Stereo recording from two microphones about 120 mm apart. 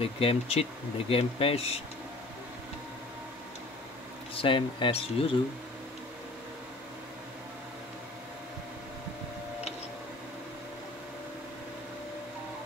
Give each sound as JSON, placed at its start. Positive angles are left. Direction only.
{"t": 0.0, "sound": "speech", "side_deg": 55}
{"t": 4.4, "sound": "speech", "side_deg": 45}